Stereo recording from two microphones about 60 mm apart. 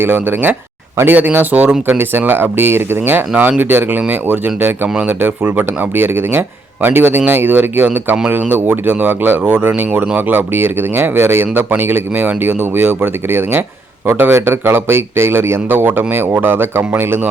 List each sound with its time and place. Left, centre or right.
0.0 s speech: right
15.8 s speech: right